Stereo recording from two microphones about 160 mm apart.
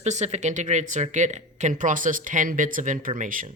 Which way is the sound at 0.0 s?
45° right (ahead or behind).